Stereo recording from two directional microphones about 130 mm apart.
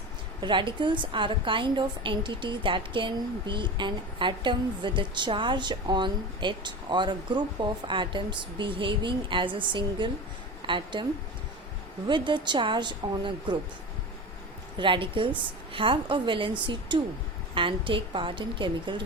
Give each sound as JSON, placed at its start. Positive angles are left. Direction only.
{"t": 0.4, "sound": "a woman's voice", "side_deg": -40}
{"t": 12.0, "sound": "a woman's voice", "side_deg": -40}
{"t": 14.8, "sound": "a woman's voice", "side_deg": -40}